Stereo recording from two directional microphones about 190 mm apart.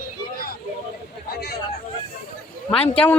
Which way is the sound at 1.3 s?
55° left (ahead or behind).